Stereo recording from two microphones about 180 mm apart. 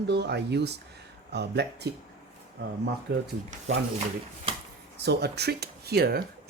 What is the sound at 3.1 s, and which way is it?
Speech, 75° right (ahead or behind).